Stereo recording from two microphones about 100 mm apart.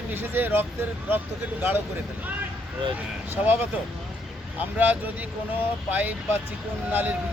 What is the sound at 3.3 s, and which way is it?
Speech, 20° right (ahead or behind).